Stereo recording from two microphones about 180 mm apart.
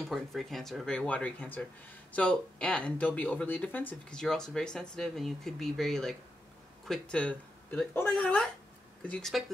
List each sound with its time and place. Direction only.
0.1 s speech: centre (ahead or behind)